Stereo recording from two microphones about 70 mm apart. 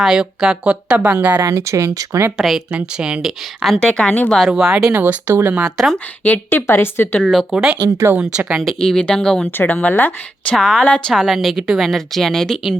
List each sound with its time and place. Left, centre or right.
0.0 s a woman's voice: centre
1.4 s speech: right
2.7 s a woman's voice: centre
3.8 s speech: centre
4.4 s speech: centre
4.9 s speech: right
5.5 s a woman's voice: centre
6.2 s speech: left
6.7 s a woman's voice: left
7.5 s speech: centre
8.8 s speech: centre
9.6 s speech: left
10.5 s a woman's voice: centre